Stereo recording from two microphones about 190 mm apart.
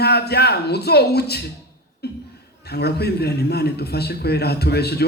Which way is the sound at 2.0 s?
55° left (ahead or behind).